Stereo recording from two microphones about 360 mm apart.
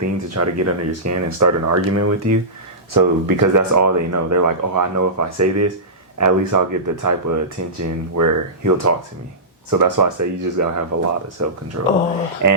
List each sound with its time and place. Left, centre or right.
0.0 s speech: right
2.9 s speech: right
12.4 s speech: right